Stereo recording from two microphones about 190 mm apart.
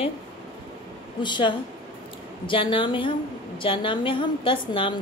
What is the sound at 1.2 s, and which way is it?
A woman's voice, 25° left (ahead or behind).